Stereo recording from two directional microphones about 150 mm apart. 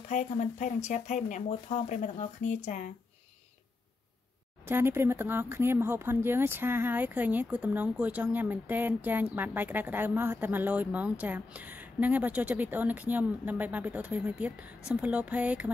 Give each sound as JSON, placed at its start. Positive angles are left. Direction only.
{"t": 0.1, "sound": "speech", "side_deg": 55}
{"t": 4.6, "sound": "speech", "side_deg": -15}